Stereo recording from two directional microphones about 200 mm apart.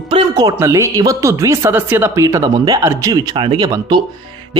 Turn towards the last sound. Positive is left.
turn(degrees=-20)  # may be behind; listen again after turning